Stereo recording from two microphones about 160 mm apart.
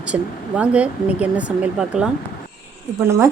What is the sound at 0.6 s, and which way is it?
Speech, 10° right (ahead or behind).